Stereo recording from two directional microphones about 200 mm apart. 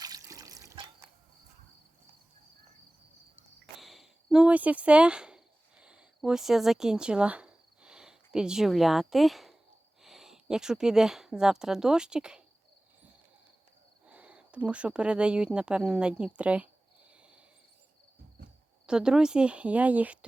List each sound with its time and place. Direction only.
0.0 s water: 20° right (ahead or behind)
3.8 s a sound: centre (ahead or behind)
10.0 s speech: centre (ahead or behind)
14.1 s speech: 5° right (ahead or behind)
17.1 s a sound: 5° right (ahead or behind)
18.9 s speech: 5° right (ahead or behind)